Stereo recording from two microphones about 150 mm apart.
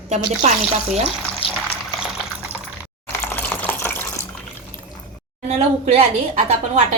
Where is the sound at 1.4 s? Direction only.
40° left (ahead or behind).